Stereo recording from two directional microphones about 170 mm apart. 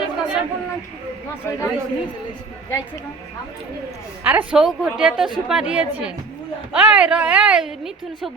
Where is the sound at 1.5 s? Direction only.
15° left (ahead or behind).